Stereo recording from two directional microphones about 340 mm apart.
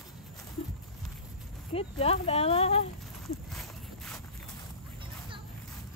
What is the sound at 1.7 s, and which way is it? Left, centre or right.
Speech, centre.